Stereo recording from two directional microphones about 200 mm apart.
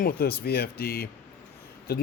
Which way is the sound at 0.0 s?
50° left (ahead or behind).